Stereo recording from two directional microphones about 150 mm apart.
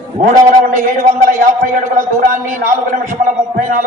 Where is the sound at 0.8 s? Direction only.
60° right (ahead or behind).